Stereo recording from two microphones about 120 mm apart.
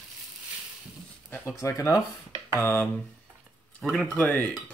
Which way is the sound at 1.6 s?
25° left (ahead or behind).